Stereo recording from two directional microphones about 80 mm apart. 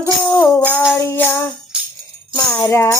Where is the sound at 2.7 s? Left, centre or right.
Left.